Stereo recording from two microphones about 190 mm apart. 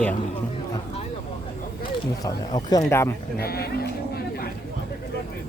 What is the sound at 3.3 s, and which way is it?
Speech, 55° left (ahead or behind).